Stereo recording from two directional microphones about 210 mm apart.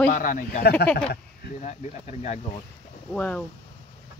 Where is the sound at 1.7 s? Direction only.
35° left (ahead or behind).